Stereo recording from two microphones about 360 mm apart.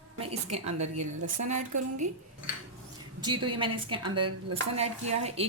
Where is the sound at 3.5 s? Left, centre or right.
Centre.